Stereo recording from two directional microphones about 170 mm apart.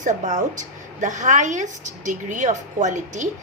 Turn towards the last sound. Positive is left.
turn(degrees=-45)  # may be behind; listen again after turning